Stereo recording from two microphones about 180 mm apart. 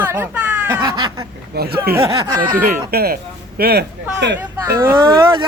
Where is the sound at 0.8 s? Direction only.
25° right (ahead or behind).